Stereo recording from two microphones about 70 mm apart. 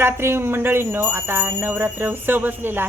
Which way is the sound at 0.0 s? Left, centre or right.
Right.